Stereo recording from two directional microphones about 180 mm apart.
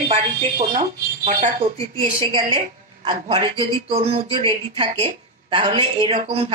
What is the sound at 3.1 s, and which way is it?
A woman's voice, 30° right (ahead or behind).